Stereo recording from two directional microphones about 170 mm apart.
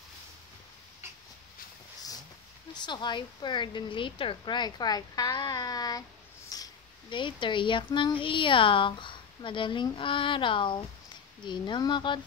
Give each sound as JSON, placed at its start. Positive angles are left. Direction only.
{"t": 2.7, "sound": "a woman's voice", "side_deg": 25}